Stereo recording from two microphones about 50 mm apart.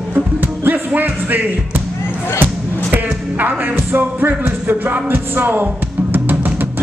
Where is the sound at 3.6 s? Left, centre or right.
Right.